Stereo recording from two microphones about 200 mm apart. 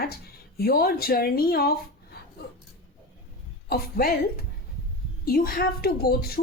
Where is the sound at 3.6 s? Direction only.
50° left (ahead or behind).